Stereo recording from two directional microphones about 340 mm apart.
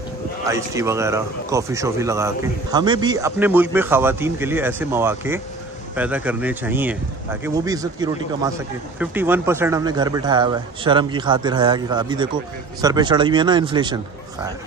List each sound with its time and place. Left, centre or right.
0.5 s speech: centre